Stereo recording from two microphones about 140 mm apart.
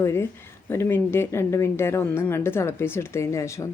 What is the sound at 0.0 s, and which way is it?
A woman's voice, 20° left (ahead or behind).